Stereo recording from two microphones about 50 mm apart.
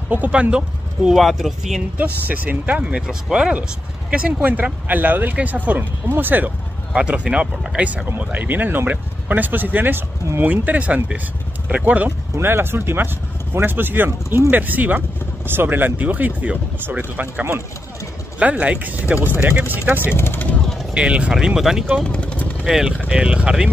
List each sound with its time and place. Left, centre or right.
0.1 s speech: right
1.1 s speech: centre
2.0 s speech: right
3.1 s speech: centre; by 6.5 s right
6.9 s speech: centre
8.2 s speech: right
12.4 s speech: right
19.2 s speech: right
20.2 s speech: left
20.9 s speech: right
22.0 s speech: left
22.7 s speech: centre
23.0 s speech: centre